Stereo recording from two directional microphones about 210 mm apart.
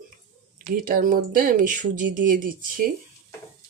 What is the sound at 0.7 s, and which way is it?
Speech, 40° right (ahead or behind).